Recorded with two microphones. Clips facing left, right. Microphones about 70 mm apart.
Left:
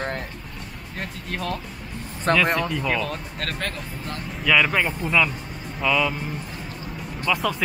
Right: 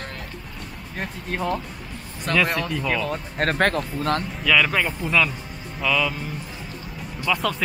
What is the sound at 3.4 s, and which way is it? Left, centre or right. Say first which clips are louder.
Speech: right 12 dB; right.